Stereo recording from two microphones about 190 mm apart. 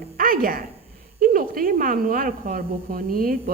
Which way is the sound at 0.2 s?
50° right (ahead or behind).